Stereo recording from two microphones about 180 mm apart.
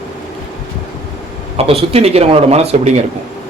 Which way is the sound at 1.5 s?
35° right (ahead or behind).